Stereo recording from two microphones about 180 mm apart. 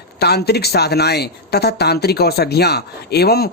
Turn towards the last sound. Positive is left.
turn(degrees=60)  # may be behind; listen again after turning